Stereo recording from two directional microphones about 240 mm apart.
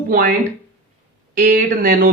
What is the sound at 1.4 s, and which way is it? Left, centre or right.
Speech, right.